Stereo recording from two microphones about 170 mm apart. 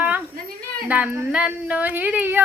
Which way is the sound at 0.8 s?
10° right (ahead or behind).